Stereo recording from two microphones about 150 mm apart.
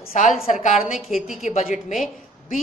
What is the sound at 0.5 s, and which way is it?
A woman's voice, 50° left (ahead or behind).